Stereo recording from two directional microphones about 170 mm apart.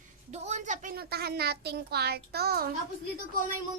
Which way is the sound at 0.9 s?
65° right (ahead or behind).